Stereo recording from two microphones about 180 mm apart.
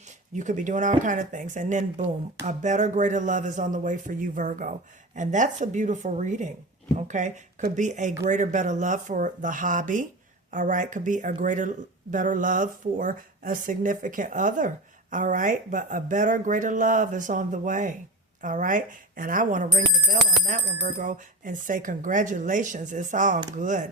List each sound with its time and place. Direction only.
0.3 s speech: 45° right (ahead or behind)